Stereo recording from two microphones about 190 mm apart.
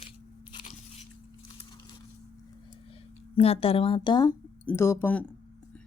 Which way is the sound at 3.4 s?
30° left (ahead or behind).